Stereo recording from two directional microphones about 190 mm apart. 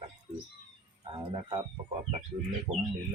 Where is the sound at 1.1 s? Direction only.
25° right (ahead or behind).